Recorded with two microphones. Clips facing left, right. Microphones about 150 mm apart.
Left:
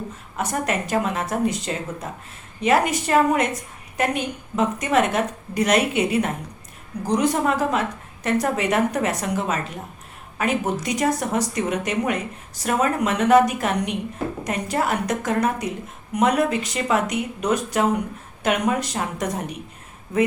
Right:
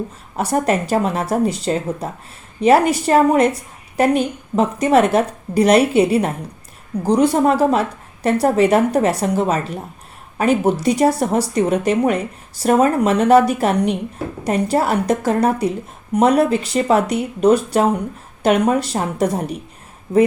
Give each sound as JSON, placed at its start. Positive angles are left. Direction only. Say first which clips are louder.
{"t": 0.3, "sound": "a woman's voice", "louder": "right 7 dB", "side_deg": -35}